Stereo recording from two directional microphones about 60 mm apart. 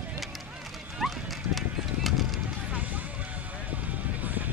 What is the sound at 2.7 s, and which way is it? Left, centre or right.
Music, right.